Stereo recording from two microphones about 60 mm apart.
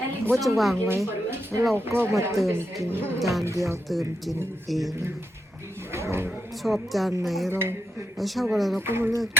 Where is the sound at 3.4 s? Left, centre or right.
Right.